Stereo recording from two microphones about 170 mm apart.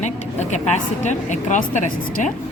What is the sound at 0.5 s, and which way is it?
A woman's voice, 45° left (ahead or behind).